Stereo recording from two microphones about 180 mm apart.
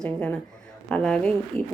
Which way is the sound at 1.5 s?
35° right (ahead or behind).